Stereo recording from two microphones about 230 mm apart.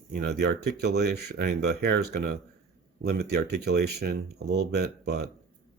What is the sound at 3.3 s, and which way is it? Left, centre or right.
Speech, right.